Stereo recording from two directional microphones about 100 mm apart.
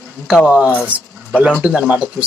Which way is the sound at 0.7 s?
20° left (ahead or behind).